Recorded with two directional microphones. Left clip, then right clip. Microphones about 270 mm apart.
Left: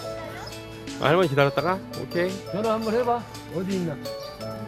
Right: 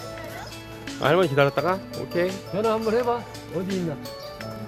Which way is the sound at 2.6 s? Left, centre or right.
Right.